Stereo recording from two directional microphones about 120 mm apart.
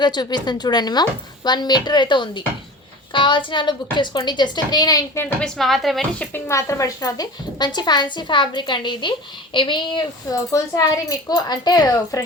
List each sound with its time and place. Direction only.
0.0 s a woman's voice: 35° left (ahead or behind)
5.2 s a woman's voice: 5° left (ahead or behind)
6.3 s a woman's voice: 25° left (ahead or behind); by 10.0 s 40° left (ahead or behind)
10.2 s a woman's voice: 30° left (ahead or behind)